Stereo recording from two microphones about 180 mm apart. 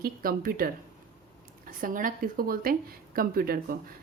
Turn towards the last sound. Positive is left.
turn(degrees=-55)  # may be behind; listen again after turning